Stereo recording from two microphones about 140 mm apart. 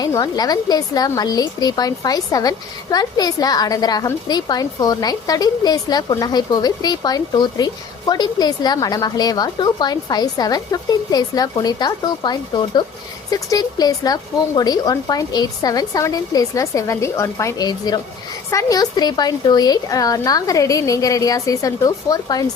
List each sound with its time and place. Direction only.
0.0 s a woman's voice: 30° left (ahead or behind)